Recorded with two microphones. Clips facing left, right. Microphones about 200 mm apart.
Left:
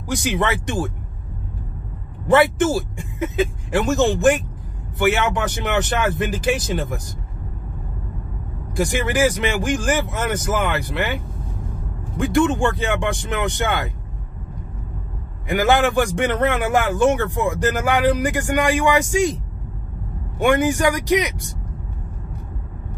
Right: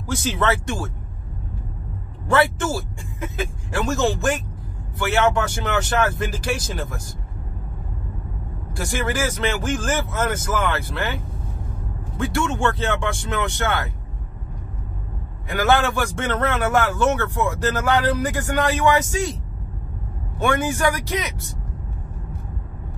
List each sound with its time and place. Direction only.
0.1 s a man's voice: 15° left (ahead or behind)
2.2 s a man's voice: 20° left (ahead or behind)
8.7 s a man's voice: 15° left (ahead or behind)
12.2 s a man's voice: 15° left (ahead or behind)
15.5 s a man's voice: 15° left (ahead or behind)